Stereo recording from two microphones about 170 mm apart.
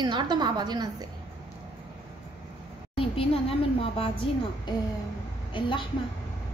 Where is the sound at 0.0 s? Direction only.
25° right (ahead or behind).